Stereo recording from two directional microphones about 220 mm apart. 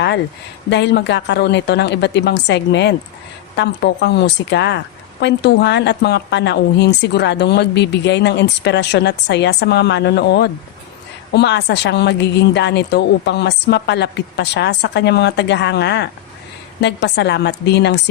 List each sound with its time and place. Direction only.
0.7 s a woman's voice: 50° left (ahead or behind)